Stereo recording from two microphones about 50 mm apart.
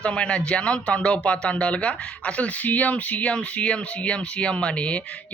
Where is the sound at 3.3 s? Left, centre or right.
Left.